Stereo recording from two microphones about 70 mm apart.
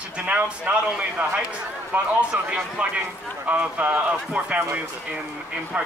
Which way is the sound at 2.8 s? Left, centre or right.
Centre.